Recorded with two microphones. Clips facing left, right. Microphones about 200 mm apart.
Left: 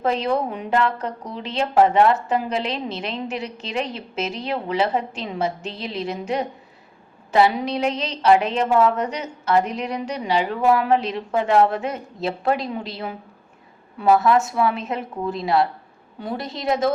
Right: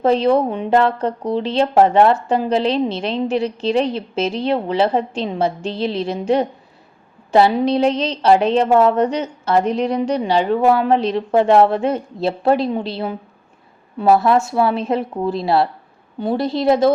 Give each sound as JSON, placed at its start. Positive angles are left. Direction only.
{"t": 0.0, "sound": "a woman's voice", "side_deg": -30}